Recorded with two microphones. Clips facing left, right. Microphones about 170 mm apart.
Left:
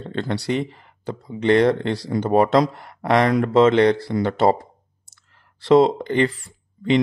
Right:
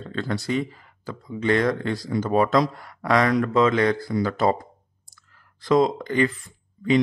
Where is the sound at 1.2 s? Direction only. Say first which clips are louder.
Left 5 dB; 25° left (ahead or behind).